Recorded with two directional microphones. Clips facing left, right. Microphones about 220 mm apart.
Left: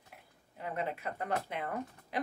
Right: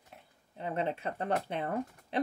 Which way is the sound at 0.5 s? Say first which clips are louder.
Right 4 dB; 25° right (ahead or behind).